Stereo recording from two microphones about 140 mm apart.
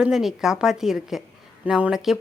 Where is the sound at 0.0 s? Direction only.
5° right (ahead or behind).